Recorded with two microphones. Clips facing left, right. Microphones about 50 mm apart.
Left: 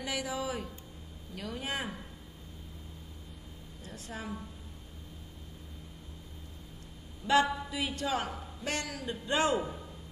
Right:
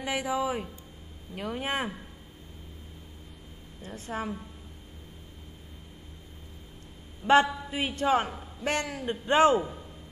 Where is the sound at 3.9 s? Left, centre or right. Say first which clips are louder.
Right 7 dB; right.